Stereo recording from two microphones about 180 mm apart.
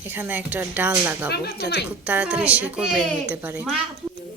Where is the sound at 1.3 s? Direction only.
65° left (ahead or behind).